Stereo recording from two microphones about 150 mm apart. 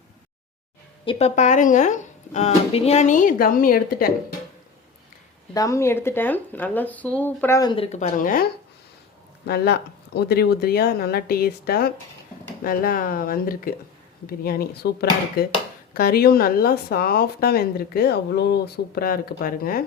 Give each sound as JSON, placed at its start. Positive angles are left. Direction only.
{"t": 1.0, "sound": "speech", "side_deg": 50}
{"t": 5.5, "sound": "speech", "side_deg": 20}
{"t": 7.6, "sound": "speech", "side_deg": 30}
{"t": 7.9, "sound": "speech", "side_deg": 50}
{"t": 9.5, "sound": "speech", "side_deg": 90}
{"t": 12.6, "sound": "speech", "side_deg": 75}
{"t": 14.3, "sound": "speech", "side_deg": 90}